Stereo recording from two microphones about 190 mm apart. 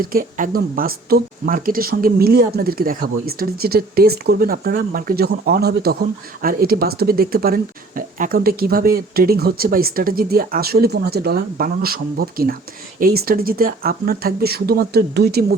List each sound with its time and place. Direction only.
0.0 s speech: 50° right (ahead or behind)